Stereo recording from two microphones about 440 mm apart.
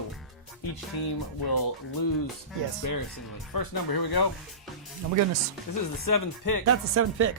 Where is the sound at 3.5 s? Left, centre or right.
Left.